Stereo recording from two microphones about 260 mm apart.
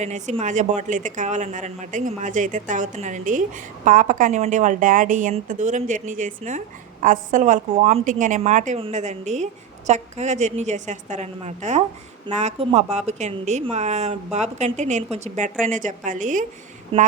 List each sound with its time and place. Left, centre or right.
0.0 s a woman's voice: right